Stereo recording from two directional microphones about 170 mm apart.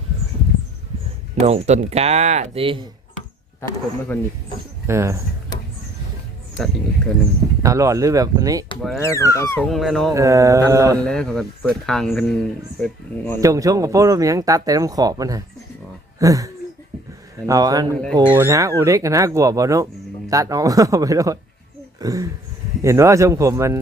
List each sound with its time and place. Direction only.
1.4 s speech: 40° right (ahead or behind)
4.1 s speech: 15° left (ahead or behind)
4.9 s speech: 15° right (ahead or behind)
7.6 s speech: 20° right (ahead or behind)
9.0 s speech: 15° left (ahead or behind)
9.6 s speech: centre (ahead or behind)
10.2 s speech: 20° right (ahead or behind)
11.0 s speech: 5° left (ahead or behind)
13.4 s speech: 20° right (ahead or behind)
17.8 s speech: 10° left (ahead or behind)
18.3 s speech: 15° right (ahead or behind)
21.9 s a sound: 20° right (ahead or behind)
22.8 s speech: 15° right (ahead or behind)